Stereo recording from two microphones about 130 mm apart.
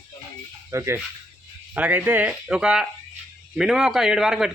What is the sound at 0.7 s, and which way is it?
A man's voice, 20° right (ahead or behind).